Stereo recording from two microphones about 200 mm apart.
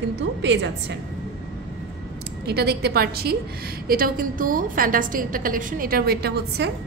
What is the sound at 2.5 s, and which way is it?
A woman's voice, 55° right (ahead or behind).